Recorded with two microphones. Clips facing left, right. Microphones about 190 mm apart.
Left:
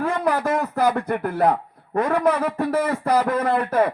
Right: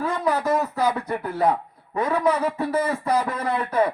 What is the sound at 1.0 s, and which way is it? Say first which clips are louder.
A man's voice: left 2 dB; 55° left (ahead or behind).